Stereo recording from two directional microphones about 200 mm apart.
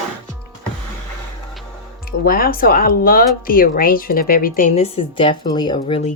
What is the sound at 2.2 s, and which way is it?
Speech, 45° left (ahead or behind).